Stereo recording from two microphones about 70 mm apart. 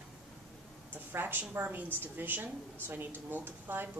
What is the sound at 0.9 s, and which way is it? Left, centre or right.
A woman's voice, right.